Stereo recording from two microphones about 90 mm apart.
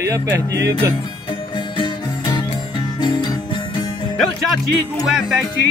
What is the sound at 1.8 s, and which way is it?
Music, 55° left (ahead or behind).